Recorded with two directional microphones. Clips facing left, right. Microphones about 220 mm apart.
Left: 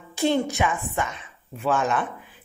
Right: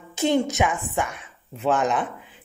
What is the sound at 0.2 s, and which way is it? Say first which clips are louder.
Speech: right 1 dB; 20° right (ahead or behind).